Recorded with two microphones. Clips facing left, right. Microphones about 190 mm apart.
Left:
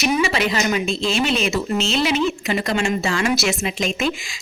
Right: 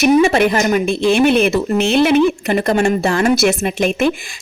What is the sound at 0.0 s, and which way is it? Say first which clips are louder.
Speech: right 8 dB; 50° right (ahead or behind).